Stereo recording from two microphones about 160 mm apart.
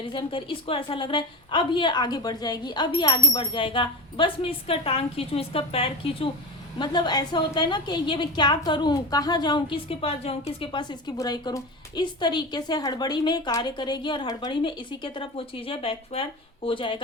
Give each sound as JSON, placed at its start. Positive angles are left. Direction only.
{"t": 0.0, "sound": "a woman's voice", "side_deg": 30}